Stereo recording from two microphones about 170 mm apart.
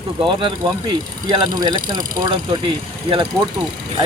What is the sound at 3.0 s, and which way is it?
Speech, 30° right (ahead or behind).